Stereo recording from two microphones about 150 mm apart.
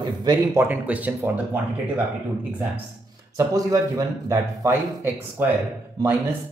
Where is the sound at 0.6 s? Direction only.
10° right (ahead or behind).